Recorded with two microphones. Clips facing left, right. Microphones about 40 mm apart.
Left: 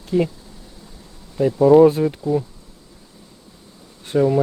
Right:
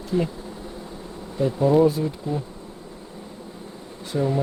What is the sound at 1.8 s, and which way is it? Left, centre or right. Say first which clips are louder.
Speech: left 6 dB; left.